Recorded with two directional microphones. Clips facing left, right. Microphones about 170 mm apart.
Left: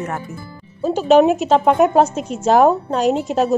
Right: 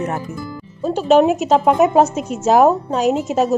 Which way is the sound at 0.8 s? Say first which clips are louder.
Left 1 dB; centre (ahead or behind).